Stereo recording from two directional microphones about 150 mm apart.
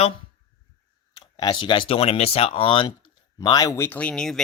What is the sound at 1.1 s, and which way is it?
Speech, 30° left (ahead or behind).